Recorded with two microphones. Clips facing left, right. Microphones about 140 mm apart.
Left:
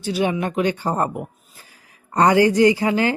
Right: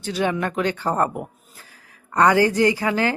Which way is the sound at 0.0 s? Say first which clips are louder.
Left 2 dB; 15° left (ahead or behind).